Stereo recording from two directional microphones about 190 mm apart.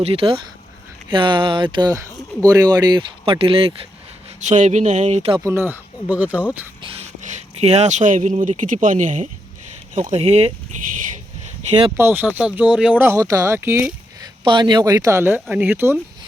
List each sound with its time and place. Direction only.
0.0 s speech: 30° right (ahead or behind)
4.4 s speech: 40° right (ahead or behind)
5.4 s speech: 15° right (ahead or behind)
6.8 s speech: 35° right (ahead or behind)
11.9 s speech: 10° right (ahead or behind)
14.4 s speech: 25° right (ahead or behind)